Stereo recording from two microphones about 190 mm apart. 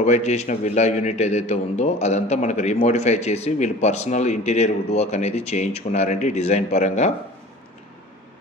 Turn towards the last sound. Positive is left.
turn(degrees=35)  # may be behind; listen again after turning